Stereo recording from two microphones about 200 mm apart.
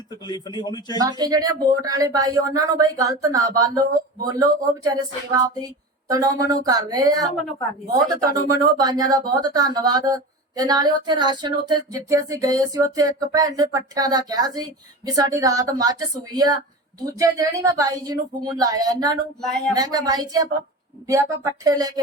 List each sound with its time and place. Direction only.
0.3 s a man's voice: 20° left (ahead or behind)
0.9 s speech: 20° right (ahead or behind)